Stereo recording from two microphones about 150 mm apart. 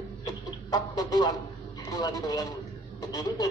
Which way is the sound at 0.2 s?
25° left (ahead or behind).